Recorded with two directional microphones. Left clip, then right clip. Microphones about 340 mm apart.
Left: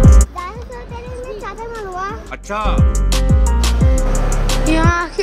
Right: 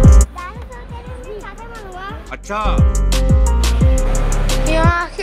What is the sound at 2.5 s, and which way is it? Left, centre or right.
Speech, centre.